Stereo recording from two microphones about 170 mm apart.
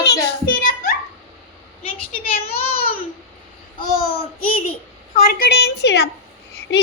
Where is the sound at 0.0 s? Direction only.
65° left (ahead or behind).